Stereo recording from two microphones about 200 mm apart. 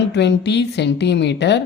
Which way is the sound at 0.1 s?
60° left (ahead or behind).